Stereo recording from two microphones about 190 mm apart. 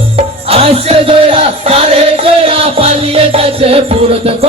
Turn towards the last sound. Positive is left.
turn(degrees=-30)  # may be behind; listen again after turning